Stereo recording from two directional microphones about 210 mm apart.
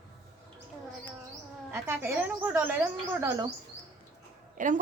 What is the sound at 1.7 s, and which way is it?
A woman's voice, 10° right (ahead or behind).